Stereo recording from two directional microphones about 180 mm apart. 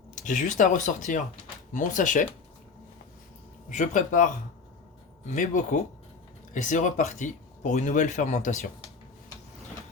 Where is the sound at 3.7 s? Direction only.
45° left (ahead or behind).